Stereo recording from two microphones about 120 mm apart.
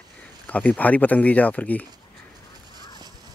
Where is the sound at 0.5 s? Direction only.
10° left (ahead or behind).